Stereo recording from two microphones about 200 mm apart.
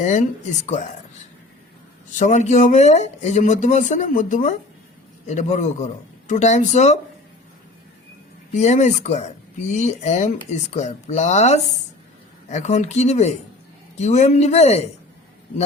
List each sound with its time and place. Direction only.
0.0 s speech: 35° left (ahead or behind)
2.0 s speech: 40° left (ahead or behind)
8.5 s speech: 35° left (ahead or behind)